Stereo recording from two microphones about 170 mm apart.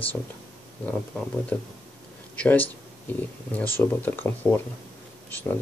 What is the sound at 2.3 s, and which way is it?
Speech, 10° left (ahead or behind).